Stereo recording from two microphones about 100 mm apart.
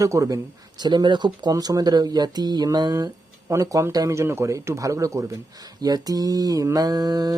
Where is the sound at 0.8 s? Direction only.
45° right (ahead or behind).